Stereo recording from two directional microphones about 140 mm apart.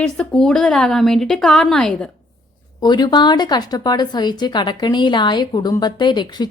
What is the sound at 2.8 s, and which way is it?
Speech, 30° left (ahead or behind).